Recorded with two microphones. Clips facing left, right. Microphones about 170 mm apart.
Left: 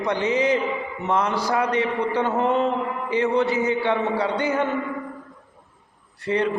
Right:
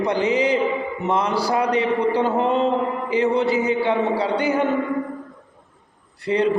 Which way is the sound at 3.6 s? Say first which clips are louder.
Right 2 dB; 35° right (ahead or behind).